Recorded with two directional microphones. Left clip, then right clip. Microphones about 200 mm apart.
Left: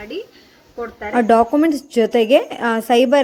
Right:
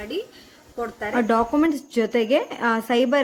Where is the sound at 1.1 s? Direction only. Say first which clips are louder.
Left 7 dB; 15° left (ahead or behind).